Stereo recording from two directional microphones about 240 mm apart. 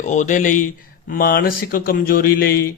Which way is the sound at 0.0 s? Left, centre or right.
Left.